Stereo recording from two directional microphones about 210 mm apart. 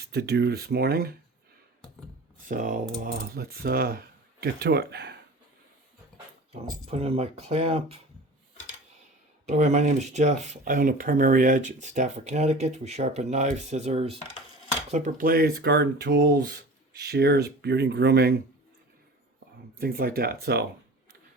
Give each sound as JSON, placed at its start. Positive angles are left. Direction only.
{"t": 0.0, "sound": "speech", "side_deg": -50}
{"t": 2.4, "sound": "speech", "side_deg": -40}
{"t": 6.9, "sound": "speech", "side_deg": -30}
{"t": 9.5, "sound": "speech", "side_deg": -35}
{"t": 19.8, "sound": "speech", "side_deg": -45}